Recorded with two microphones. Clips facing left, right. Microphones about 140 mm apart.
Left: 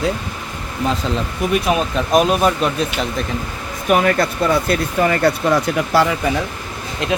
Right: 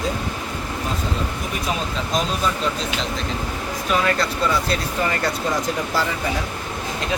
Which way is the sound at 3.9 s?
55° left (ahead or behind).